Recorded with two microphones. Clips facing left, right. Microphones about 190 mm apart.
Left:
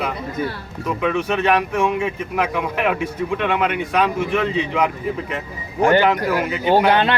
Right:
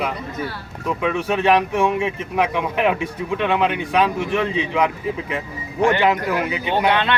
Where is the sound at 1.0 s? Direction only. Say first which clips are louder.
Left 1 dB; 5° right (ahead or behind).